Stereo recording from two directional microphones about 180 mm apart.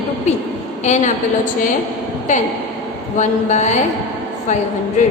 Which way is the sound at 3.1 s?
40° left (ahead or behind).